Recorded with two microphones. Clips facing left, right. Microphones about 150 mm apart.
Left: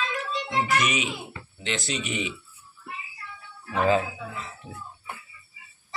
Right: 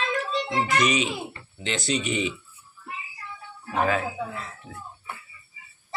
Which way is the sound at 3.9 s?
20° left (ahead or behind).